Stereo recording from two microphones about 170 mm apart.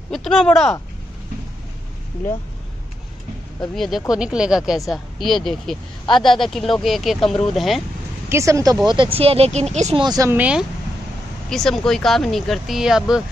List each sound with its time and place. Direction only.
0.1 s speech: 5° left (ahead or behind)
3.7 s speech: centre (ahead or behind)
8.3 s speech: 15° right (ahead or behind)
8.8 s speech: 30° right (ahead or behind)
10.0 s speech: 20° right (ahead or behind)
10.3 s speech: 10° right (ahead or behind)
11.4 s speech: centre (ahead or behind)